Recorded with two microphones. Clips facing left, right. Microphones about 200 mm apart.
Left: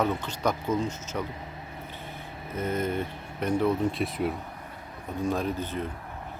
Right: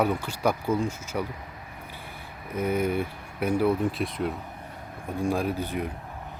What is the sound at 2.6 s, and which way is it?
Speech, 10° right (ahead or behind).